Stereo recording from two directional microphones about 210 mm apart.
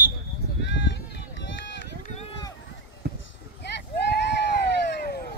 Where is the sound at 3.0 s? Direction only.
50° right (ahead or behind).